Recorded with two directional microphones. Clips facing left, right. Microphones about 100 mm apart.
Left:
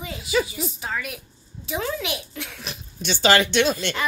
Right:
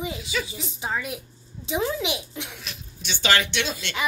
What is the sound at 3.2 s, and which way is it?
Speech, 40° left (ahead or behind).